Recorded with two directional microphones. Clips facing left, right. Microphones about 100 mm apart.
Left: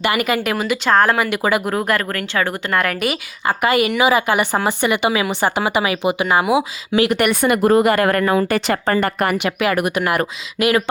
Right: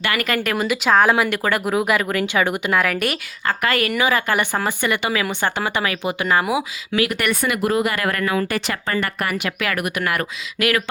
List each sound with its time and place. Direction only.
0.2 s a woman's voice: 10° left (ahead or behind)
1.6 s speech: 5° right (ahead or behind)
2.7 s speech: centre (ahead or behind)
3.4 s a woman's voice: 15° left (ahead or behind)
6.5 s speech: 25° left (ahead or behind)
7.4 s speech: 40° left (ahead or behind)
9.1 s speech: 25° left (ahead or behind)